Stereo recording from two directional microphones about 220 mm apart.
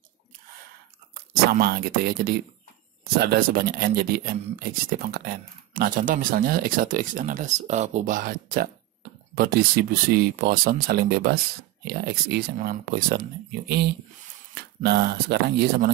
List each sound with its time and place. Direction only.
1.1 s speech: 45° right (ahead or behind)